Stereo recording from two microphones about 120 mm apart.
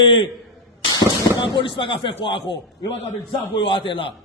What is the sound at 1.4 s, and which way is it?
A man's voice, 40° left (ahead or behind).